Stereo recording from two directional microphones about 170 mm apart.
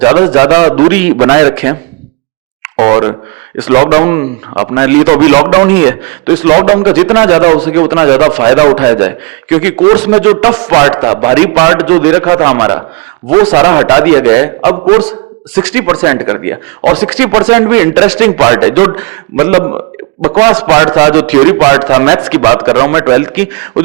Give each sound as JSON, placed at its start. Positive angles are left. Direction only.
{"t": 0.0, "sound": "a man's voice", "side_deg": -20}
{"t": 0.9, "sound": "a man's voice", "side_deg": -10}
{"t": 9.7, "sound": "a man's voice", "side_deg": -30}
{"t": 11.3, "sound": "a man's voice", "side_deg": -15}
{"t": 15.6, "sound": "a man's voice", "side_deg": -15}